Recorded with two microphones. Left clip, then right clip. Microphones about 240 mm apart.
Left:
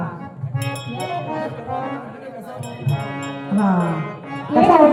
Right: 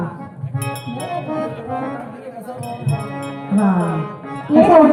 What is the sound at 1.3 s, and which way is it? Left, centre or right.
Music, left.